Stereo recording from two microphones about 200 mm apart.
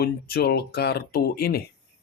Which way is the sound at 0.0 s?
50° left (ahead or behind).